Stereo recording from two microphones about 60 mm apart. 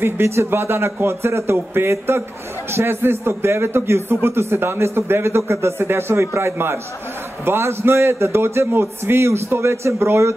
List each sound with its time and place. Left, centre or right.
0.0 s a man's voice: right